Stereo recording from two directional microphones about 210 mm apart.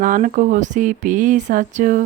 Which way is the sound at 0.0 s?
40° right (ahead or behind).